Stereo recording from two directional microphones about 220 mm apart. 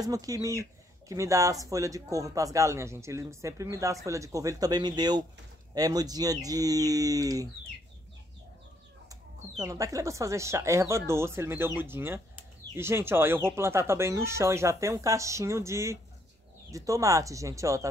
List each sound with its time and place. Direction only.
0.0 s speech: 15° right (ahead or behind)
9.1 s speech: 15° right (ahead or behind)